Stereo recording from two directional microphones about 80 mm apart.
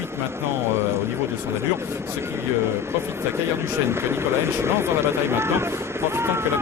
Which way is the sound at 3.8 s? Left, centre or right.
Right.